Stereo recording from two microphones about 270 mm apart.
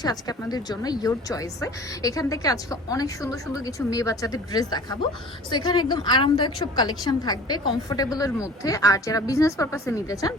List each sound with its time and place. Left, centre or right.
0.0 s a woman's voice: centre